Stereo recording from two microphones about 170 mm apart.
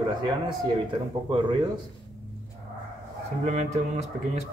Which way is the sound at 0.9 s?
30° right (ahead or behind).